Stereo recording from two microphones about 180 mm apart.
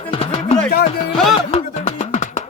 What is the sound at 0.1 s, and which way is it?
Music, 35° left (ahead or behind).